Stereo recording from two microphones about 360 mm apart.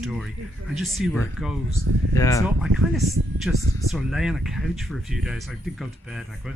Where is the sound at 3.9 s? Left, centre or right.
Centre.